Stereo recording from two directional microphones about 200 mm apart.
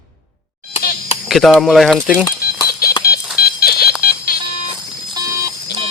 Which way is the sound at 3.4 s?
50° left (ahead or behind).